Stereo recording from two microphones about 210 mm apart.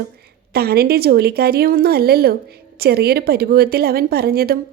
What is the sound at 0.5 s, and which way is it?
A woman's voice, 50° right (ahead or behind).